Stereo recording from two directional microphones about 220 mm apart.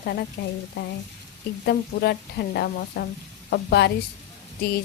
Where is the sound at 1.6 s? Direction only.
45° left (ahead or behind).